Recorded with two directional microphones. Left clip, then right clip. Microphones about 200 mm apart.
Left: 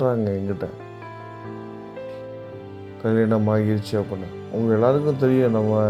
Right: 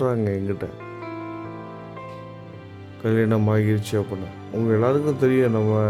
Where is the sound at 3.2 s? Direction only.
20° right (ahead or behind).